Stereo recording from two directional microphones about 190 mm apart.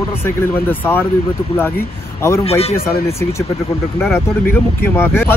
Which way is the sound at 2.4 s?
35° left (ahead or behind).